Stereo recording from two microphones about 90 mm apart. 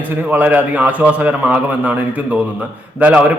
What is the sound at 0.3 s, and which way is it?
A man's voice, 15° right (ahead or behind).